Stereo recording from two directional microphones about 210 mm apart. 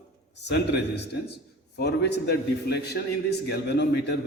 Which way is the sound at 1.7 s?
50° left (ahead or behind).